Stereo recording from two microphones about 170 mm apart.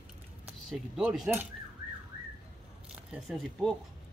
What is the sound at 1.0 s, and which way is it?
Speech, centre (ahead or behind).